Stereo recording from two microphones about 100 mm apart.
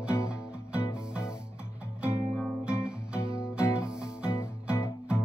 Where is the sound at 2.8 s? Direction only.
10° right (ahead or behind).